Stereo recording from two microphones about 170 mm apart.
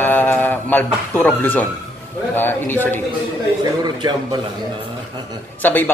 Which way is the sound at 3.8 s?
25° right (ahead or behind).